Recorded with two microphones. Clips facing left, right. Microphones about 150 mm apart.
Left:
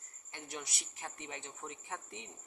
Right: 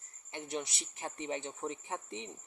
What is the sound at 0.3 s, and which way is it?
Speech, 20° right (ahead or behind).